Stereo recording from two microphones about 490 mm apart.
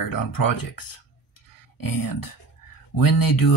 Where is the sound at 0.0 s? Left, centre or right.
Left.